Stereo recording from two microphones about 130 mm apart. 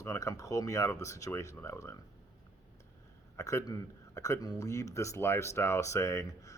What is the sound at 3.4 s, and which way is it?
Speech, 25° left (ahead or behind).